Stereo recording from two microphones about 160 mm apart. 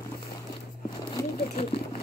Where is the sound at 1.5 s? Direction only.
40° left (ahead or behind).